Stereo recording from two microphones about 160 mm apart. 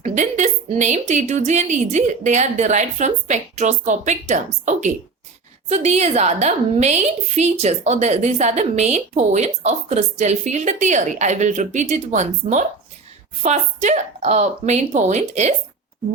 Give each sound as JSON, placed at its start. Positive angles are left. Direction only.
{"t": 0.0, "sound": "a woman's voice", "side_deg": -50}